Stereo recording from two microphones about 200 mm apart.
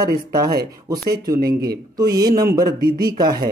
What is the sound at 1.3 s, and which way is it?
Speech, 50° right (ahead or behind).